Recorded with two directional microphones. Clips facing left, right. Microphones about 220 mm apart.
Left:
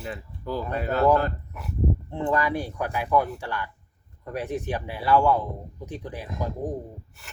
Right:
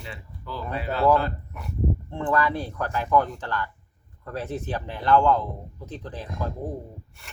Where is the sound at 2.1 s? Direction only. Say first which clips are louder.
Right 1 dB; 20° left (ahead or behind).